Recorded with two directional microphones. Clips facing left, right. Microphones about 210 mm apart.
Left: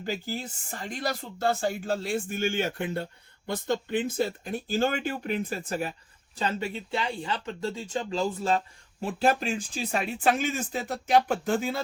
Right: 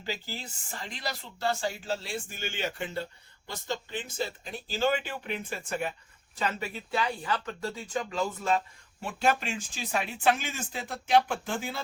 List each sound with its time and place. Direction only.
0.0 s speech: 50° left (ahead or behind)